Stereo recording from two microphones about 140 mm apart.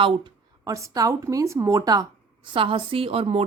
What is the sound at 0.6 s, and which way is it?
Speech, 25° right (ahead or behind).